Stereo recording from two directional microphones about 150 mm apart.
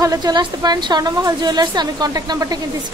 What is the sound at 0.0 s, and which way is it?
A woman's voice, 25° right (ahead or behind).